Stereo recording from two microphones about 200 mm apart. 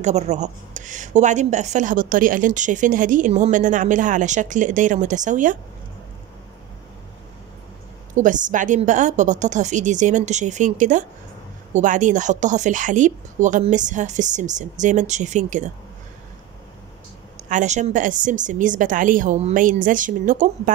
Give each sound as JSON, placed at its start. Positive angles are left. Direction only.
{"t": 0.0, "sound": "a woman's voice", "side_deg": -35}
{"t": 8.1, "sound": "a woman's voice", "side_deg": -40}
{"t": 17.5, "sound": "a woman's voice", "side_deg": -35}